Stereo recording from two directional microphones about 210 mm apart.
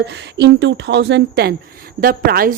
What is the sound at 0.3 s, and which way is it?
Speech, 55° right (ahead or behind).